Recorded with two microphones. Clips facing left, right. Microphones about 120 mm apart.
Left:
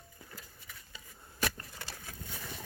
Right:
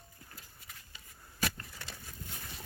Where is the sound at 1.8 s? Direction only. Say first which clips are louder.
Left 2 dB; 90° left.